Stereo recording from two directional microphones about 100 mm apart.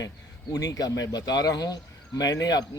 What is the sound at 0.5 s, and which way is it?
Speech, 35° left (ahead or behind).